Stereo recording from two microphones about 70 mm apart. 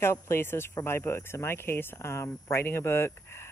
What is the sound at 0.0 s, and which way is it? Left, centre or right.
Speech, left.